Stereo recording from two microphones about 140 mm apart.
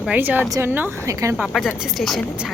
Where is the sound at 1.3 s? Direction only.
Centre (ahead or behind).